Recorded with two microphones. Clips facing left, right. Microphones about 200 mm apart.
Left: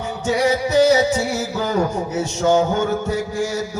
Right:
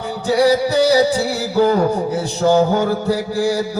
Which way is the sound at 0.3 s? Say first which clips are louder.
Right 4 dB; 35° right (ahead or behind).